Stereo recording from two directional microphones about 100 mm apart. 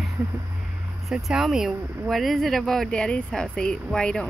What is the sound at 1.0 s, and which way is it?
Speech, 5° right (ahead or behind).